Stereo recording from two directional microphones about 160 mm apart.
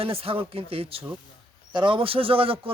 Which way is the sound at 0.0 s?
35° right (ahead or behind).